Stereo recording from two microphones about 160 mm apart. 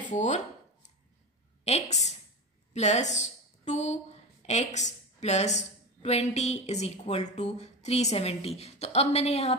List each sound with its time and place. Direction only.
0.1 s speech: 50° left (ahead or behind)
1.6 s a woman's voice: 45° left (ahead or behind)